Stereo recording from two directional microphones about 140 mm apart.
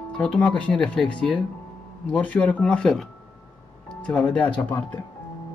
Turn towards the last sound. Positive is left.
turn(degrees=10)  # may be behind; listen again after turning